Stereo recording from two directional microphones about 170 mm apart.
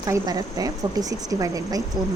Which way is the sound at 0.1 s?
20° right (ahead or behind).